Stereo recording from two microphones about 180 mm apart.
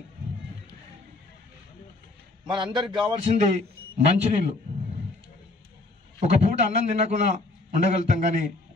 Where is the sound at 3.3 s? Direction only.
40° right (ahead or behind).